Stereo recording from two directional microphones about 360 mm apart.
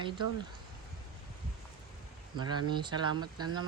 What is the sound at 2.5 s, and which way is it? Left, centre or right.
Speech, centre.